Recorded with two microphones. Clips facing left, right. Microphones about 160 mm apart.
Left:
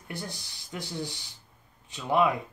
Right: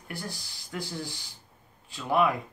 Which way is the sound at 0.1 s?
20° left (ahead or behind).